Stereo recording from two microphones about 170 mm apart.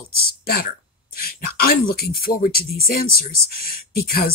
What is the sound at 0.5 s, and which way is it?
Speech, 60° left (ahead or behind).